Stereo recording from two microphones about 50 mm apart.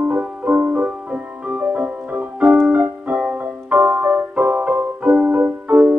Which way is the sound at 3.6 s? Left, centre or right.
Right.